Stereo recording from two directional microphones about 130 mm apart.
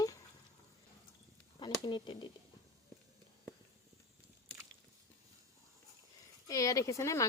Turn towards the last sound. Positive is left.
turn(degrees=25)  # may be behind; listen again after turning